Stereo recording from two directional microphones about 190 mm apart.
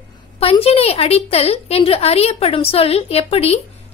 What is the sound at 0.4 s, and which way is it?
A woman's voice, 30° left (ahead or behind).